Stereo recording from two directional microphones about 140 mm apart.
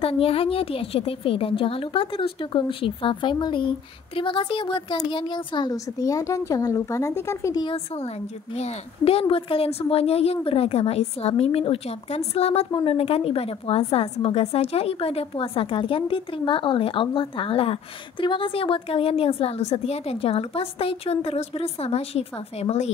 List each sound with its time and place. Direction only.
0.0 s a woman's voice: 45° left (ahead or behind); by 7.6 s 20° left (ahead or behind)
7.6 s a woman's voice: 45° left (ahead or behind)